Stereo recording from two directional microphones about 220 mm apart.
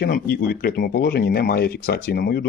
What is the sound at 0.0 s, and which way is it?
Speech, 40° left (ahead or behind).